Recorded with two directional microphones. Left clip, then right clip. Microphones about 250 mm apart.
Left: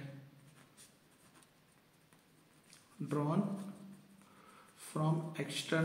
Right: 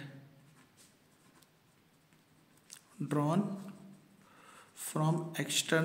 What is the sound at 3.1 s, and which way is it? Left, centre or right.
Speech, right.